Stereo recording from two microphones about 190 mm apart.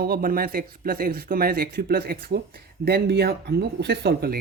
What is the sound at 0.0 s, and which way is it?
Speech, 50° right (ahead or behind).